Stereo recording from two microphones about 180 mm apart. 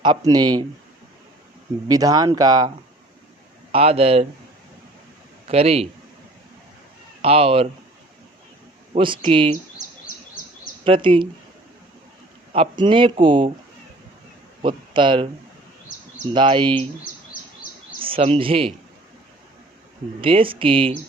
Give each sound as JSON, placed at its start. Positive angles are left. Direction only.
{"t": 0.0, "sound": "speech", "side_deg": -25}
{"t": 1.9, "sound": "speech", "side_deg": -20}
{"t": 3.7, "sound": "speech", "side_deg": -35}
{"t": 5.5, "sound": "speech", "side_deg": -35}
{"t": 7.2, "sound": "speech", "side_deg": -30}
{"t": 9.0, "sound": "speech", "side_deg": -30}
{"t": 10.8, "sound": "speech", "side_deg": -30}
{"t": 12.5, "sound": "speech", "side_deg": -30}
{"t": 14.6, "sound": "speech", "side_deg": -25}
{"t": 16.3, "sound": "speech", "side_deg": -25}
{"t": 18.0, "sound": "speech", "side_deg": -30}
{"t": 20.2, "sound": "speech", "side_deg": -30}